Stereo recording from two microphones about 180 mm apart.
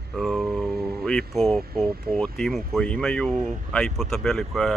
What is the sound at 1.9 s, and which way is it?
Speech, 55° right (ahead or behind).